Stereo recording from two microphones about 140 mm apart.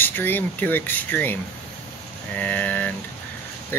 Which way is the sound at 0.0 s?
15° left (ahead or behind).